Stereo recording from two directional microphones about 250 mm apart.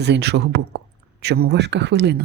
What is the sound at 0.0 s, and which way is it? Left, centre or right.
A woman's voice, right.